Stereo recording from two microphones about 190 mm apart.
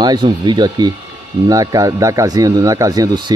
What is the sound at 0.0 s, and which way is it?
Speech, 20° right (ahead or behind).